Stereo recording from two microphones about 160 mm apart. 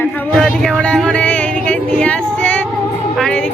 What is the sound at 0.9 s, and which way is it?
Music, 5° left (ahead or behind).